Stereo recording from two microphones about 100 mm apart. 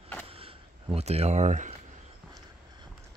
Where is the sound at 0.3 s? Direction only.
65° right (ahead or behind); by 1.3 s 90° right.